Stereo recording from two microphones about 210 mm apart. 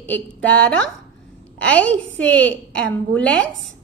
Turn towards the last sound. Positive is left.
turn(degrees=5)  # may be behind; listen again after turning